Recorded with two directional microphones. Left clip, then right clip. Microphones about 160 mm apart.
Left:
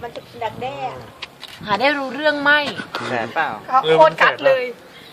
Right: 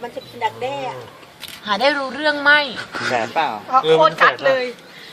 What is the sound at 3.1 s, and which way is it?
Speech, 75° right (ahead or behind).